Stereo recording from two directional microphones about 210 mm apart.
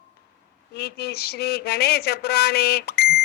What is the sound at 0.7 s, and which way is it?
Speech, 50° left (ahead or behind).